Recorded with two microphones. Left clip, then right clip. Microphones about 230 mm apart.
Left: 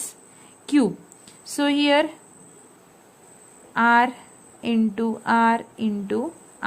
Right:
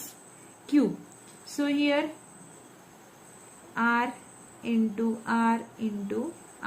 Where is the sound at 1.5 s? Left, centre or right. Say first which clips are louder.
Left 7 dB; left.